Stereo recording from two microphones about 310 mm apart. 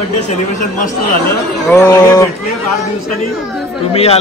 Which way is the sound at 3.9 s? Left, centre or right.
Centre.